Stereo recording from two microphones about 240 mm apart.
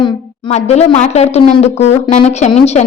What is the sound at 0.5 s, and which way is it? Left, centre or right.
A woman's voice, left.